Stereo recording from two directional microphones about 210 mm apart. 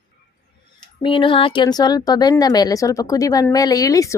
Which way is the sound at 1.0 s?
25° left (ahead or behind).